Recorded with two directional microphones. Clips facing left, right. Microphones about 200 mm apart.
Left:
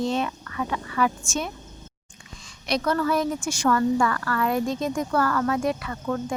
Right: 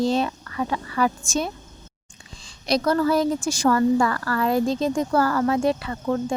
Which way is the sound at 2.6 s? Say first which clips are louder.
Right 4 dB; 35° right (ahead or behind).